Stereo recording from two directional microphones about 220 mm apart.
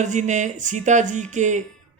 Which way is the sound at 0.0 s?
35° right (ahead or behind).